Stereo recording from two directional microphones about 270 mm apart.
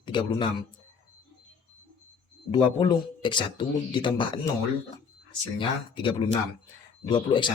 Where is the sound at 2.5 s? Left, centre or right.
Centre.